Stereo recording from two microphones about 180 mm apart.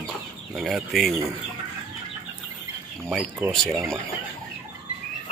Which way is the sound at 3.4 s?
10° right (ahead or behind).